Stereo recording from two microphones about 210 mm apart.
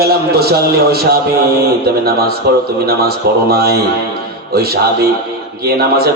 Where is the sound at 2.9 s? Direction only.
50° right (ahead or behind).